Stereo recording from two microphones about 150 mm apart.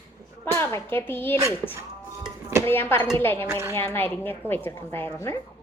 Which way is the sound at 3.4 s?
15° right (ahead or behind).